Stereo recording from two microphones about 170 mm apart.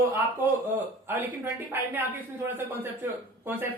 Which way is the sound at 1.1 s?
10° right (ahead or behind).